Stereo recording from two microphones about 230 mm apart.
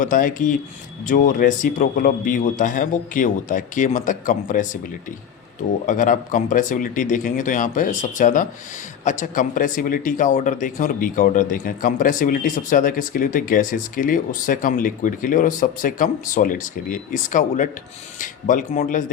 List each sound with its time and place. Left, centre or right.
0.0 s speech: left
5.8 s speech: left